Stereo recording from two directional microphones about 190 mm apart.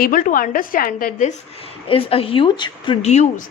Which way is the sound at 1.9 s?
30° left (ahead or behind).